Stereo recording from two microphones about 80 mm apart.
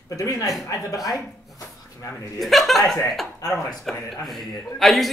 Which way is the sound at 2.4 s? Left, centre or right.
Centre.